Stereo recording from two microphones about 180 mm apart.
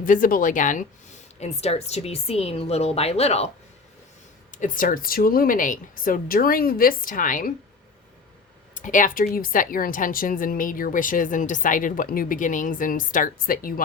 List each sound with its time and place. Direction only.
0.0 s a woman's voice: 50° left (ahead or behind)
1.4 s a woman's voice: 35° left (ahead or behind)
4.5 s a woman's voice: 45° left (ahead or behind)
8.7 s a woman's voice: 45° left (ahead or behind)